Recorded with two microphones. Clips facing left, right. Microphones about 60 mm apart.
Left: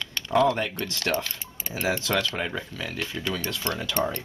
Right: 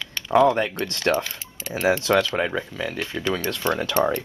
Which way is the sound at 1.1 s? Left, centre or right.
Right.